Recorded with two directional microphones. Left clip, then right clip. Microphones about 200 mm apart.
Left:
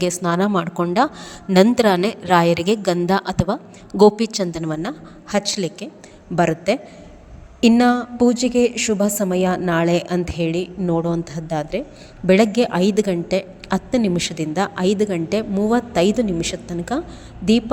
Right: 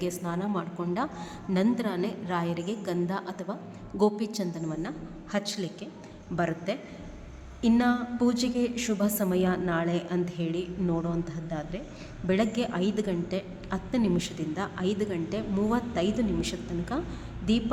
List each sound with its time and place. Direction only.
0.0 s a woman's voice: 40° left (ahead or behind)
1.7 s a woman's voice: 45° left (ahead or behind); by 17.0 s 30° left (ahead or behind)